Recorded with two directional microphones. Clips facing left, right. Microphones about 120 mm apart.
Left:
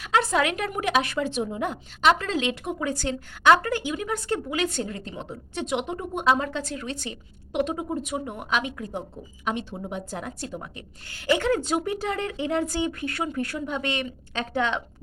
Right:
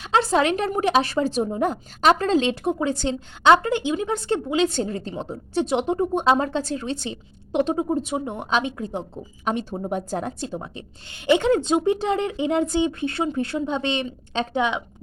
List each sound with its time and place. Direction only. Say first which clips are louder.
0.0 s a woman's voice: right 3 dB; 30° right (ahead or behind)
9.4 s a woman's voice: right 4 dB; 40° right (ahead or behind); by 14.8 s 15° right (ahead or behind)